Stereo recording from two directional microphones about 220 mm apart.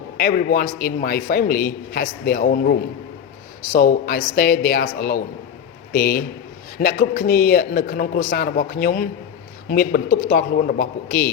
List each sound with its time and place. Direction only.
0.2 s a man's voice: 40° left (ahead or behind)